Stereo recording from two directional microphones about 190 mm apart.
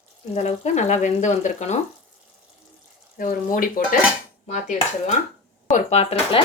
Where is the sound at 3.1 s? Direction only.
45° left (ahead or behind).